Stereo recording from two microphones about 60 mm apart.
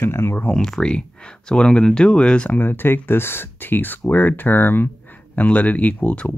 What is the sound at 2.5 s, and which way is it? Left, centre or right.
Speech, left.